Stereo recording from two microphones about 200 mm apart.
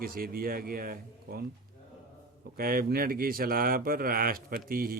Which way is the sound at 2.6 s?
45° right (ahead or behind).